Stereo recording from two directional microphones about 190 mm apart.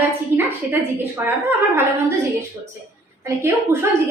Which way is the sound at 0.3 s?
10° right (ahead or behind).